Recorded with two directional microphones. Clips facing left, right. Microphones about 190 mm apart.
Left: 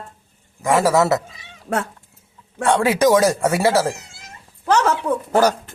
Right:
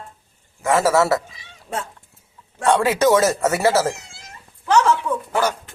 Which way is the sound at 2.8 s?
15° left (ahead or behind).